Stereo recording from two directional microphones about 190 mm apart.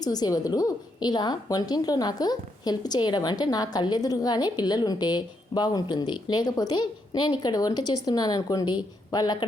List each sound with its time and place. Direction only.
0.0 s a woman's voice: 20° left (ahead or behind)